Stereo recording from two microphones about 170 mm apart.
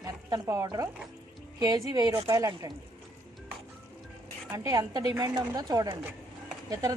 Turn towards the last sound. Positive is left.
turn(degrees=-20)  # may be behind; listen again after turning